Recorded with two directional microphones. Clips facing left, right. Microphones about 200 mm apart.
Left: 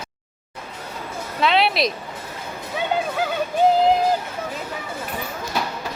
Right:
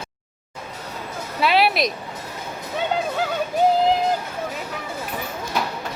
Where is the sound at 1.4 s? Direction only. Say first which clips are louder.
Even; 5° right (ahead or behind).